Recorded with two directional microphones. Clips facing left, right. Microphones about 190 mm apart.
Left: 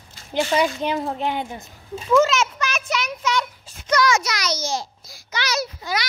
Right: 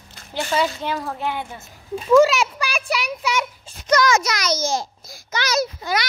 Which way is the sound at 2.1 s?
10° right (ahead or behind).